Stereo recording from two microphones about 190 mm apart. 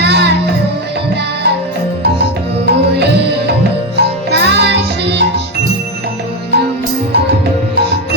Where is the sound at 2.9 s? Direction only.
60° right (ahead or behind).